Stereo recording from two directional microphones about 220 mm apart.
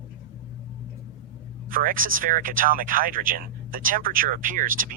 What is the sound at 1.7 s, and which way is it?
Speech, 40° right (ahead or behind).